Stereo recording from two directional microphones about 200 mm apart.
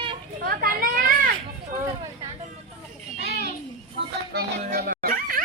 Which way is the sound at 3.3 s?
50° right (ahead or behind).